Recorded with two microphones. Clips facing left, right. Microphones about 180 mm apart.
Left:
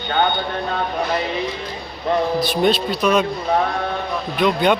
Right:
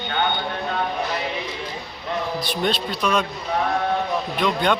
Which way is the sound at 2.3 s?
5° left (ahead or behind).